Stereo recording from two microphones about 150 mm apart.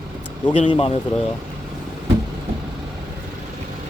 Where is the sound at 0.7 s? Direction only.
40° left (ahead or behind).